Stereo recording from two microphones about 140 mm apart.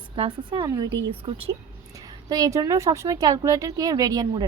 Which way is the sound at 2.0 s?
25° right (ahead or behind).